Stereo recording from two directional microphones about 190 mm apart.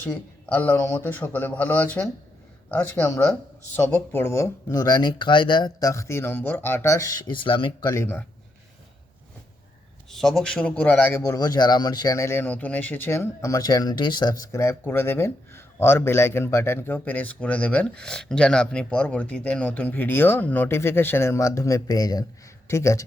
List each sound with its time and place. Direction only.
0.0 s a man's voice: 10° left (ahead or behind)
10.1 s a man's voice: centre (ahead or behind)